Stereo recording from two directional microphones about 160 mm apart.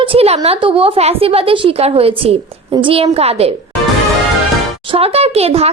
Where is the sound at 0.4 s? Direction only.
35° right (ahead or behind).